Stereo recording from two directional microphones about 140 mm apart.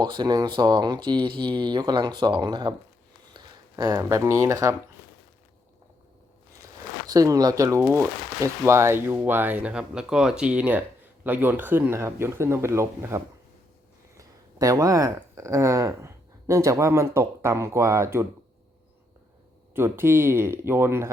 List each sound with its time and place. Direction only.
0.0 s speech: 30° right (ahead or behind)
7.1 s speech: 25° right (ahead or behind)
19.7 s speech: 15° right (ahead or behind)